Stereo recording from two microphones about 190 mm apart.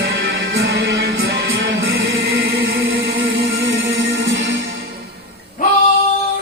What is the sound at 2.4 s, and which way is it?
Music, 60° right (ahead or behind).